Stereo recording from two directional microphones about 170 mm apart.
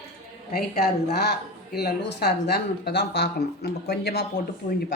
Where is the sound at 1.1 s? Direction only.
75° left (ahead or behind).